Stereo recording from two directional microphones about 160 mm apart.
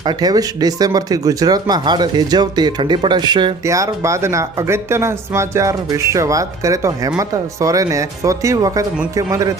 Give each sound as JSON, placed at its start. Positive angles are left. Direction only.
{"t": 0.0, "sound": "speech", "side_deg": -25}